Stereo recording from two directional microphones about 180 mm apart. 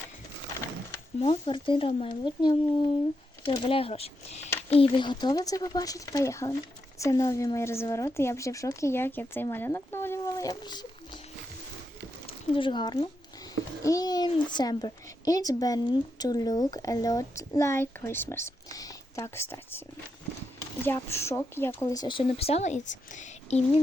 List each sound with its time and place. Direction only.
1.2 s speech: 30° left (ahead or behind)
12.5 s speech: 25° left (ahead or behind)
20.8 s speech: 15° left (ahead or behind); by 23.6 s 40° left (ahead or behind)